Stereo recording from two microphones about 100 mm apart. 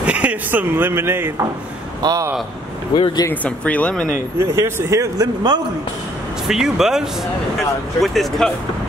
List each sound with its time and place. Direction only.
0.0 s speech: 10° right (ahead or behind)
2.0 s a man's voice: 40° right (ahead or behind)
3.0 s speech: 45° left (ahead or behind)
3.4 s speech: 15° left (ahead or behind)
4.4 s speech: 25° right (ahead or behind); by 5.6 s 40° right (ahead or behind)
6.4 s speech: 5° right (ahead or behind)